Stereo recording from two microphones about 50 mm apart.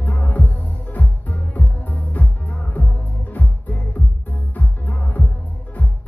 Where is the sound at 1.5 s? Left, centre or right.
Left.